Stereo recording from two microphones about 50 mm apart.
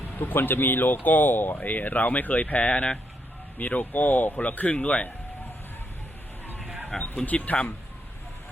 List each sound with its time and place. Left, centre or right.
0.1 s speech: left
2.7 s speech: left
3.6 s speech: left
6.9 s speech: centre
7.3 s speech: left